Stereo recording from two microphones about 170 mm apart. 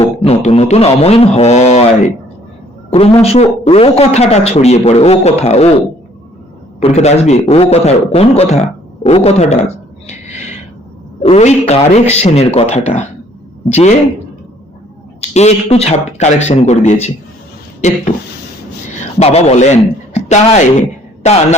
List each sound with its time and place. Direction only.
0.0 s a man's voice: 35° left (ahead or behind)
6.8 s a man's voice: 40° left (ahead or behind)
10.1 s a sound: 45° left (ahead or behind)
11.2 s a man's voice: 40° left (ahead or behind)
15.3 s a man's voice: 40° left (ahead or behind)
19.2 s a man's voice: 40° left (ahead or behind)